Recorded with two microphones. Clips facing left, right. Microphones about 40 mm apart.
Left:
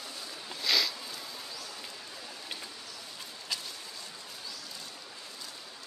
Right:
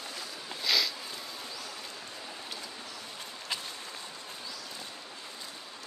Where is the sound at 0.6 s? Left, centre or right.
Centre.